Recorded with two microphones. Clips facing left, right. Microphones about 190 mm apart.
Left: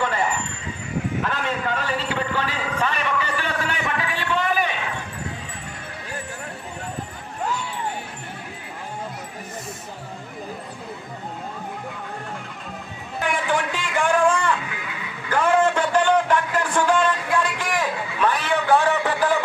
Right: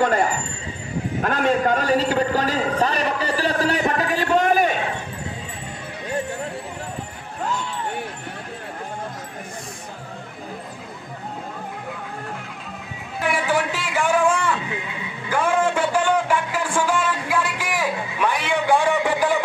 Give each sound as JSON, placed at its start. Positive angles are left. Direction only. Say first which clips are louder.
{"t": 1.2, "sound": "a man's voice", "louder": "right 6 dB", "side_deg": -45}
{"t": 13.3, "sound": "a sound", "louder": "right 2 dB", "side_deg": -5}
{"t": 14.6, "sound": "music", "louder": "right 3 dB", "side_deg": -25}
{"t": 15.2, "sound": "music", "louder": "left 1 dB", "side_deg": -10}